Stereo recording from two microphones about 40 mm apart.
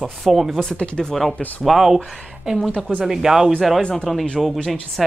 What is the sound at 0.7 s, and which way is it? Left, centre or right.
Speech, left.